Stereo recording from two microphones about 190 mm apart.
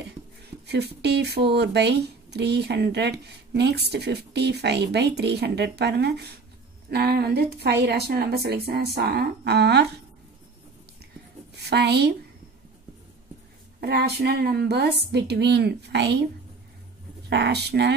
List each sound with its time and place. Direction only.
0.7 s speech: 60° right (ahead or behind)
11.5 s a woman's voice: 60° right (ahead or behind)
13.7 s speech: 60° right (ahead or behind)
17.3 s speech: 60° right (ahead or behind)